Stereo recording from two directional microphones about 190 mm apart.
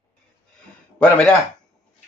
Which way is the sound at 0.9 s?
5° left (ahead or behind).